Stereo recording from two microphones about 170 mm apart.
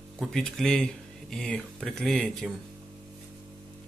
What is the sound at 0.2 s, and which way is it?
Speech, centre (ahead or behind).